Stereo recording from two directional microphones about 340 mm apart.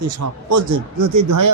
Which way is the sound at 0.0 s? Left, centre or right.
Right.